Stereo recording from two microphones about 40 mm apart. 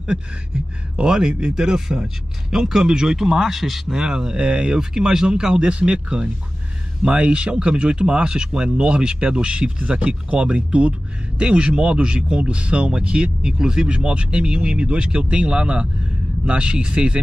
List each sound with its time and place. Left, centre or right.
0.9 s speech: centre
3.9 s speech: centre
4.7 s speech: centre